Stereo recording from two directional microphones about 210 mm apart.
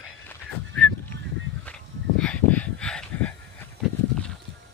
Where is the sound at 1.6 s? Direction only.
5° left (ahead or behind).